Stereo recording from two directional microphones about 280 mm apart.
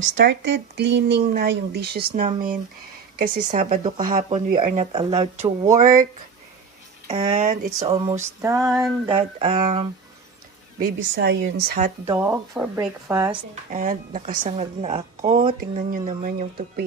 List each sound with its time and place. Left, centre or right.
0.0 s speech: right
2.1 s speech: centre
3.7 s speech: centre
7.1 s speech: right
8.6 s a sound: centre
9.0 s speech: centre
10.8 s speech: right
12.1 s speech: centre
13.7 s speech: right